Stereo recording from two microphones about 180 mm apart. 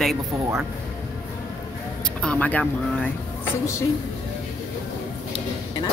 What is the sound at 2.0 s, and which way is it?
Speech, 5° left (ahead or behind).